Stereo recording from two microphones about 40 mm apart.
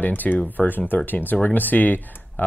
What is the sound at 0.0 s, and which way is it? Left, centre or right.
Speech, left.